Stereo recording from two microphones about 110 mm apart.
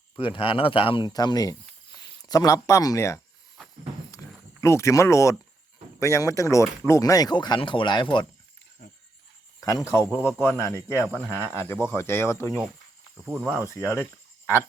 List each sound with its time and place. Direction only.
0.2 s speech: 50° left (ahead or behind); by 3.2 s 30° left (ahead or behind)
4.1 s a sound: 25° left (ahead or behind)
6.0 s speech: 25° left (ahead or behind); by 8.3 s 45° left (ahead or behind)
9.6 s speech: 35° left (ahead or behind)
10.2 s speech: 20° left (ahead or behind)
13.7 s speech: 25° left (ahead or behind)